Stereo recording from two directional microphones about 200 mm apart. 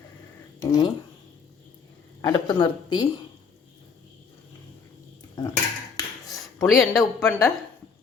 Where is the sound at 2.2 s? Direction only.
20° left (ahead or behind).